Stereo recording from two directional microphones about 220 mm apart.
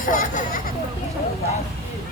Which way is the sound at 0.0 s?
35° left (ahead or behind).